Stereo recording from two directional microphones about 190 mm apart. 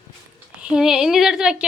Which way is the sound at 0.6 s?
5° right (ahead or behind).